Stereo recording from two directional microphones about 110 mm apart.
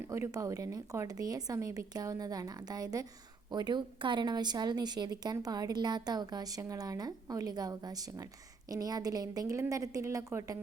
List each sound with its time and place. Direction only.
0.1 s a woman's voice: 30° right (ahead or behind)